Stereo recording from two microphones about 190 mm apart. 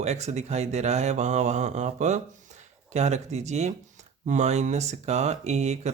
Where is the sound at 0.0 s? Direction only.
35° right (ahead or behind).